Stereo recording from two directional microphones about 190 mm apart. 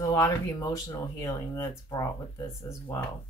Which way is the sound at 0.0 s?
20° left (ahead or behind).